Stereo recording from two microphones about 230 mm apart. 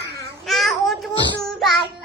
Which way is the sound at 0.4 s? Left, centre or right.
Centre.